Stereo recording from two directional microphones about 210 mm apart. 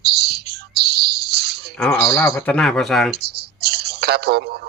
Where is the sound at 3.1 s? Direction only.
50° right (ahead or behind).